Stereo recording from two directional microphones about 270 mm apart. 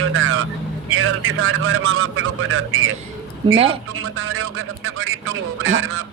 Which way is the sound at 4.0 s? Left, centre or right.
Right.